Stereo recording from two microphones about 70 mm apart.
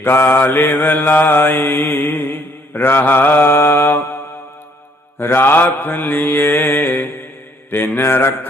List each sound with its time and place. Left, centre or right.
0.0 s mantra: left